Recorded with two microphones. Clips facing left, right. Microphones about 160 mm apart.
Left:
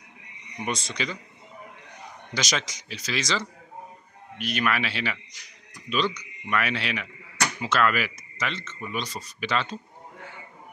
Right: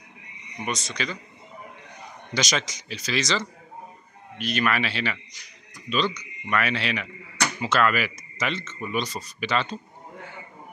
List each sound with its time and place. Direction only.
0.7 s speech: 25° left (ahead or behind)
2.3 s speech: 5° left (ahead or behind)
8.4 s speech: 10° right (ahead or behind)